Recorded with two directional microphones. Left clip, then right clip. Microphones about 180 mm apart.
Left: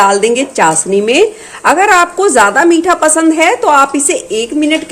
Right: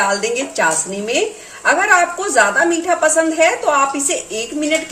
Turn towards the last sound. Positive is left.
turn(degrees=45)  # may be behind; listen again after turning